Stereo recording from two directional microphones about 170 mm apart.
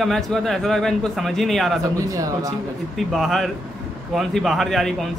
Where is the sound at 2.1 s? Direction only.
20° right (ahead or behind).